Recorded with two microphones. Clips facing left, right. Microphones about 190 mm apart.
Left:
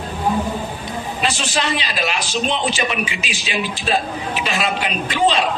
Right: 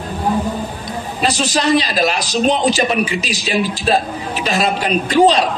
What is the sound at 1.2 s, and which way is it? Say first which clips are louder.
A man's voice: right 6 dB; 40° right (ahead or behind).